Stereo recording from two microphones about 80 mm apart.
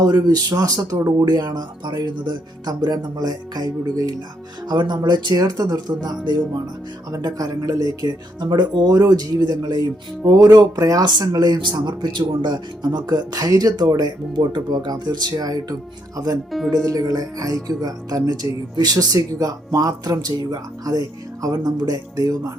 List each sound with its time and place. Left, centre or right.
0.0 s speech: right
4.7 s speech: right
11.0 s speech: right
14.3 s speech: right
16.5 s speech: centre
16.7 s speech: right